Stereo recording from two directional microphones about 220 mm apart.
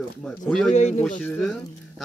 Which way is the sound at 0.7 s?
30° left (ahead or behind).